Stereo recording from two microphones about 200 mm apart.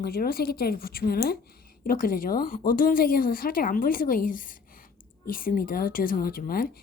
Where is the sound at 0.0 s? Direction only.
50° left (ahead or behind).